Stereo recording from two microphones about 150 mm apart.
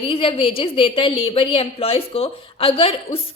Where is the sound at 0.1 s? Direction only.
35° left (ahead or behind).